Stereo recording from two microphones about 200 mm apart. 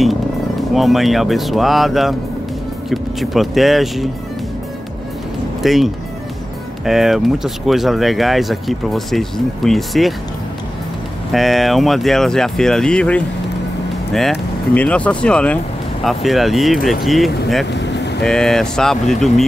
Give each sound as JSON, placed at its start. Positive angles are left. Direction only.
{"t": 0.7, "sound": "speech", "side_deg": 0}
{"t": 5.6, "sound": "speech", "side_deg": 0}
{"t": 11.3, "sound": "speech", "side_deg": 0}
{"t": 17.7, "sound": "vehicle", "side_deg": 60}
{"t": 18.2, "sound": "speech", "side_deg": 5}